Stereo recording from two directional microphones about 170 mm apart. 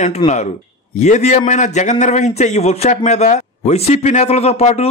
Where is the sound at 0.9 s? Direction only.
45° left (ahead or behind).